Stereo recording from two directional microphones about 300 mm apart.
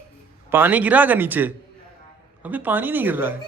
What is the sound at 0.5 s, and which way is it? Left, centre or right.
Speech, centre.